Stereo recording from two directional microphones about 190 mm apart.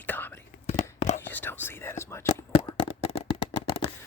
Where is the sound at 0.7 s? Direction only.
40° left (ahead or behind).